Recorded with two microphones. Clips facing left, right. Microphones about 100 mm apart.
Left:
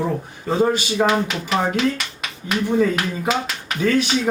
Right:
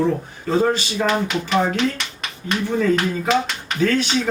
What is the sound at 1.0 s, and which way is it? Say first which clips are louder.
Speech: even; 5° left (ahead or behind).